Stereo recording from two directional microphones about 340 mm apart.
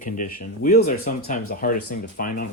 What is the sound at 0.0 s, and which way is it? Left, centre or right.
Speech, left.